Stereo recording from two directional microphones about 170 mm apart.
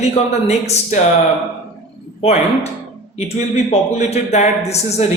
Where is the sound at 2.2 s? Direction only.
40° left (ahead or behind).